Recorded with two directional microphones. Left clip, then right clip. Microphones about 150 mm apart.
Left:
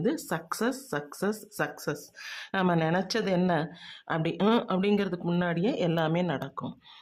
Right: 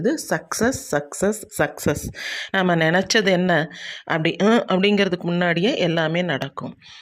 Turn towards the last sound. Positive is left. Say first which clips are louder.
# right 7 dB
turn(degrees=-10)  # may be behind; listen again after turning